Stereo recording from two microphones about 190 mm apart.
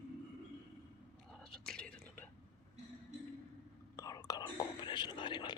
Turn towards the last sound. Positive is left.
turn(degrees=25)  # may be behind; listen again after turning